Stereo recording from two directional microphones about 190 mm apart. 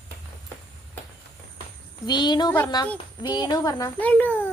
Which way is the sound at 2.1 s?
20° left (ahead or behind).